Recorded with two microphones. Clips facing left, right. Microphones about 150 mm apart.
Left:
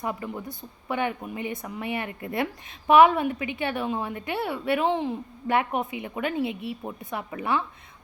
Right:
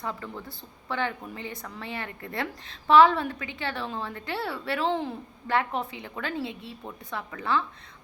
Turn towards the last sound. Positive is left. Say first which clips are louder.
# left 1 dB
turn(degrees=20)  # may be behind; listen again after turning